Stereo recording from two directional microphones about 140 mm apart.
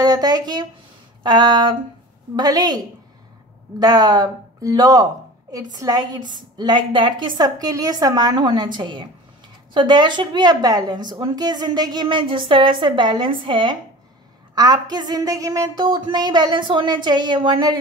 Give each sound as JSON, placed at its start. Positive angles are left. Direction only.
{"t": 0.0, "sound": "a sound", "side_deg": -30}
{"t": 1.2, "sound": "a woman's voice", "side_deg": -30}
{"t": 3.8, "sound": "a woman's voice", "side_deg": -25}